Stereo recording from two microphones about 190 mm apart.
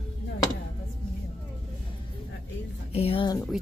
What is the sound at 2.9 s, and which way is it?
Speech, 30° left (ahead or behind).